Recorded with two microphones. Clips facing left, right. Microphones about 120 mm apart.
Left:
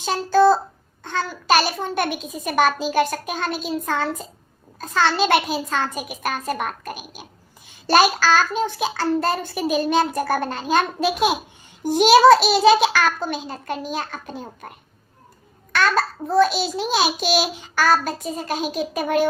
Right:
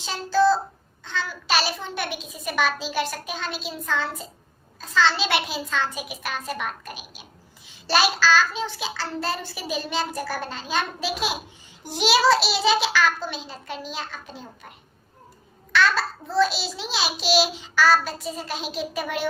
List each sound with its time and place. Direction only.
0.0 s a child's voice: 50° left (ahead or behind)
15.7 s a child's voice: 50° left (ahead or behind)